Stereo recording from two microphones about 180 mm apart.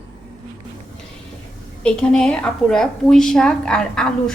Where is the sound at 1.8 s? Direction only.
5° left (ahead or behind).